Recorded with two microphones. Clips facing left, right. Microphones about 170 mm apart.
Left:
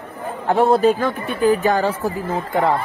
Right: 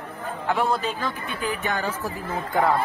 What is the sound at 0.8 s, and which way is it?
Speech, 50° left (ahead or behind).